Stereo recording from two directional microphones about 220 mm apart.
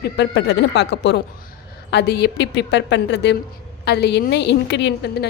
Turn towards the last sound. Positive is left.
turn(degrees=50)  # may be behind; listen again after turning